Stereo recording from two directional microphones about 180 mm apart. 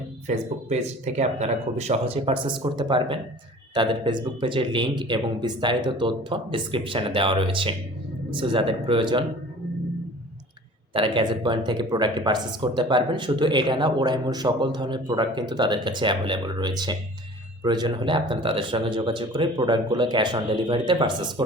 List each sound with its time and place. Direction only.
0.3 s speech: 40° right (ahead or behind)
10.9 s speech: 25° right (ahead or behind)